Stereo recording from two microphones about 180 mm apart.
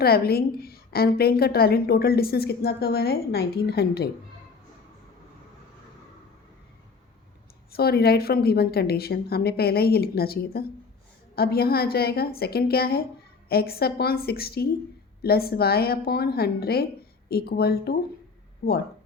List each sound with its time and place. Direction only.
0.0 s a woman's voice: 60° left (ahead or behind)
7.7 s a woman's voice: 60° left (ahead or behind)